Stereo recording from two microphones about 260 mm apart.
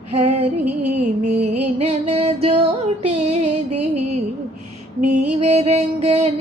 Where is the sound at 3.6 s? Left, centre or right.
Right.